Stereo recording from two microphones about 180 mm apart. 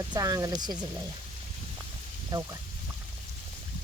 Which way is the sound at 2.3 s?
20° right (ahead or behind).